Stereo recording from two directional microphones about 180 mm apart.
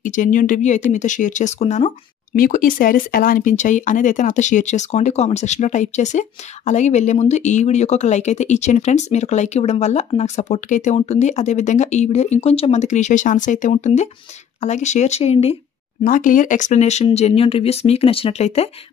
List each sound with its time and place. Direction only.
0.0 s speech: 45° left (ahead or behind)
2.3 s speech: 50° left (ahead or behind)
16.0 s speech: 50° left (ahead or behind)